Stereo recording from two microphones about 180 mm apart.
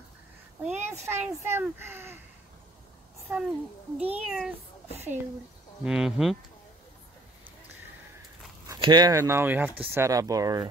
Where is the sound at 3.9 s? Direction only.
5° right (ahead or behind).